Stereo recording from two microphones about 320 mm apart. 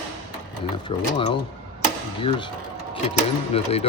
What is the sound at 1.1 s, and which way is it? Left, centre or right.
Speech, centre.